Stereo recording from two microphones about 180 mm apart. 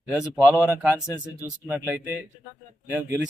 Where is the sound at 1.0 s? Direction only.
15° left (ahead or behind).